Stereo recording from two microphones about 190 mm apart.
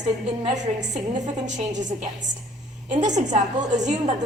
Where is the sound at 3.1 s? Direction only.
40° right (ahead or behind).